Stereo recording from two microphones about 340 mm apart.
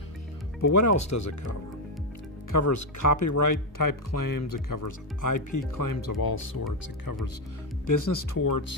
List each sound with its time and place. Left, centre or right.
0.6 s speech: left
7.8 s speech: left